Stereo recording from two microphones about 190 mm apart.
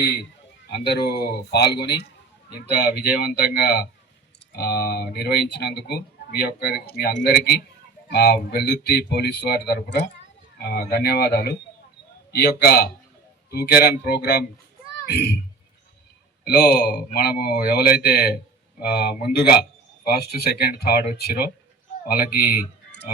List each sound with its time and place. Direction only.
0.7 s speech: 60° left (ahead or behind)
16.4 s speech: 55° left (ahead or behind)
22.4 s speech: 10° right (ahead or behind)